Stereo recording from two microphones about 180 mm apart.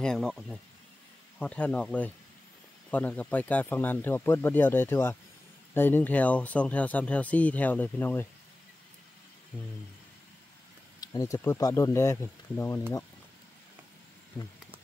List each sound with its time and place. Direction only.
0.0 s speech: centre (ahead or behind)
9.5 s speech: 5° right (ahead or behind)
11.0 s speech: 20° left (ahead or behind)